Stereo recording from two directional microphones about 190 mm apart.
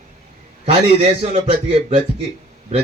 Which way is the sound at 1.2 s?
30° right (ahead or behind).